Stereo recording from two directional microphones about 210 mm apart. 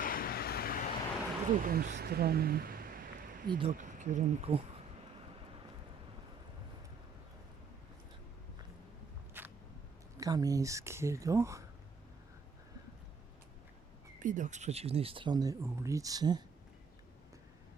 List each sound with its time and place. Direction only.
0.0 s vehicle: 45° left (ahead or behind)
1.5 s speech: 40° right (ahead or behind)
3.5 s speech: 30° right (ahead or behind)
9.4 s a sound: 10° right (ahead or behind)
10.2 s speech: 15° right (ahead or behind)
14.2 s speech: 35° right (ahead or behind); by 16.4 s 20° right (ahead or behind)